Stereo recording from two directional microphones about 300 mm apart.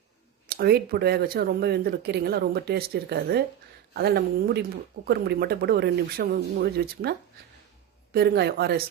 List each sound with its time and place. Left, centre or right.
0.4 s speech: right